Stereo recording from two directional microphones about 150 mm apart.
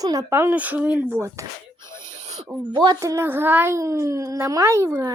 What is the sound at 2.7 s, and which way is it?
A woman's voice, 25° right (ahead or behind).